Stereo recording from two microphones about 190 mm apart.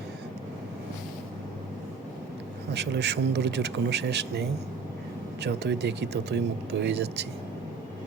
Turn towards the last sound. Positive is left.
turn(degrees=-65)  # may be behind; listen again after turning